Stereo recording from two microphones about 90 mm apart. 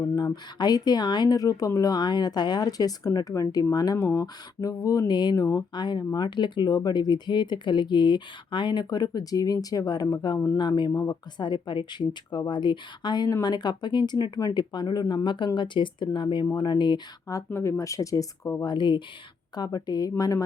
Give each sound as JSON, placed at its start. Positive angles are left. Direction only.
{"t": 0.6, "sound": "a woman's voice", "side_deg": 50}
{"t": 10.9, "sound": "speech", "side_deg": 40}
{"t": 11.3, "sound": "a woman's voice", "side_deg": 60}
{"t": 17.2, "sound": "speech", "side_deg": 35}
{"t": 18.6, "sound": "a woman's voice", "side_deg": 55}
{"t": 19.5, "sound": "speech", "side_deg": 45}